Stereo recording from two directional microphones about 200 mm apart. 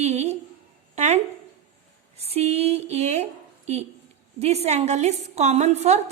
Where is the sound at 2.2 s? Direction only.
30° right (ahead or behind).